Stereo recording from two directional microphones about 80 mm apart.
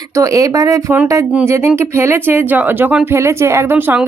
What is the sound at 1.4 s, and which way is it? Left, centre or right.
Speech, right.